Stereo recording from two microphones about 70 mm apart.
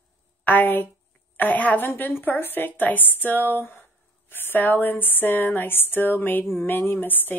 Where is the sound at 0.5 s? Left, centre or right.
Left.